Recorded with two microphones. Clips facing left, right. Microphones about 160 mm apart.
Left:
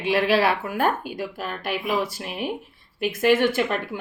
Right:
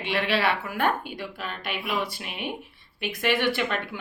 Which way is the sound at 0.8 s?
40° left (ahead or behind).